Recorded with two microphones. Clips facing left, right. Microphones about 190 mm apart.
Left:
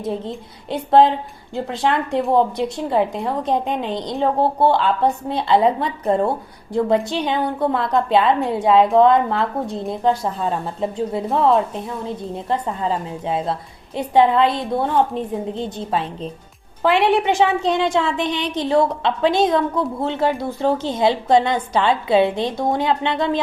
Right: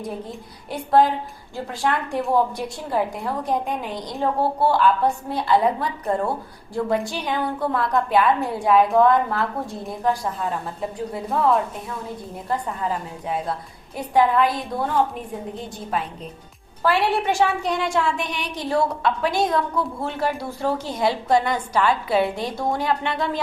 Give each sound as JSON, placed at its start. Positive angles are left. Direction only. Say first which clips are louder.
{"t": 0.7, "sound": "a woman's voice", "louder": "left 4 dB", "side_deg": 25}